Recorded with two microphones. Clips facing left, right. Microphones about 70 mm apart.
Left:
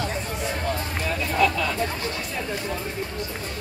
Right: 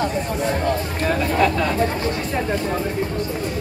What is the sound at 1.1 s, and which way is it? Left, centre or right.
Vehicle, right.